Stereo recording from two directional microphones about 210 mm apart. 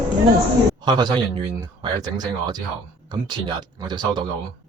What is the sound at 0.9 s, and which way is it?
Speech, 20° right (ahead or behind).